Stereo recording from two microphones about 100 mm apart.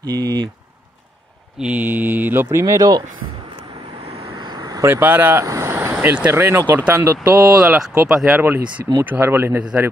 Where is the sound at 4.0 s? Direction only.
65° right (ahead or behind).